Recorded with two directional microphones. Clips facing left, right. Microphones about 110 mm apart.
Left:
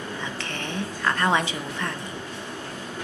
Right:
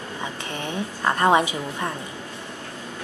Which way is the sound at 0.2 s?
15° right (ahead or behind).